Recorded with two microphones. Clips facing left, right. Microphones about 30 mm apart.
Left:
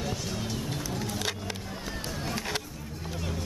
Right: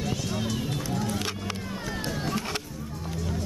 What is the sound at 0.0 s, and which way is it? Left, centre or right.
Run, centre.